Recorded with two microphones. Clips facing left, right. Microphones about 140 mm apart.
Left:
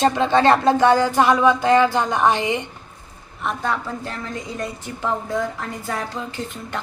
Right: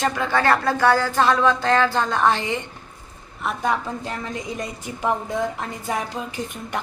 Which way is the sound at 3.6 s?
15° right (ahead or behind).